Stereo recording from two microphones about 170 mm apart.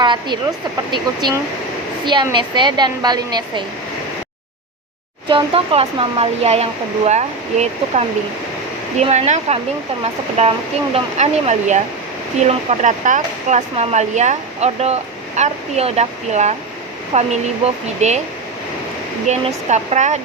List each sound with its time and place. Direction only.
0.0 s a woman's voice: 25° right (ahead or behind)
5.3 s speech: 35° right (ahead or behind)
19.3 s speech: 40° right (ahead or behind)